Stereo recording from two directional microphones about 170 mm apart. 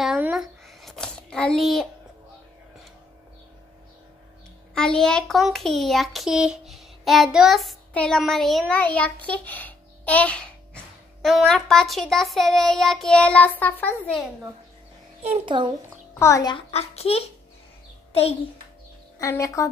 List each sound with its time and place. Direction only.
0.0 s a sound: 5° right (ahead or behind)
4.7 s a child's voice: 5° left (ahead or behind)
11.2 s child singing: centre (ahead or behind)
15.2 s a child's voice: 35° right (ahead or behind)
16.2 s a child's voice: 20° left (ahead or behind)
16.5 s a child's voice: 40° left (ahead or behind)
19.1 s a woman's voice: 15° left (ahead or behind)